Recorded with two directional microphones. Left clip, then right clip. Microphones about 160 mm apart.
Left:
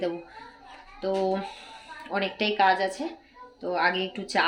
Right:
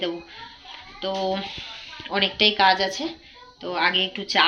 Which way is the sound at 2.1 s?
5° right (ahead or behind).